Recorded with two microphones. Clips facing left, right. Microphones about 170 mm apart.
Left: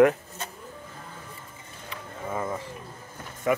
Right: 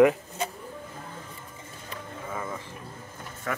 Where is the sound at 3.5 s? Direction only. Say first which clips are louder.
Left 8 dB; 15° left (ahead or behind).